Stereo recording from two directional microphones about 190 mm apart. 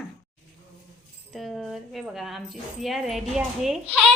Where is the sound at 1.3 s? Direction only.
Centre (ahead or behind).